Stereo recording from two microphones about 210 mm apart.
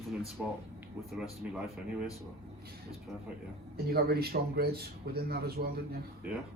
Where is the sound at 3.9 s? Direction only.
50° right (ahead or behind).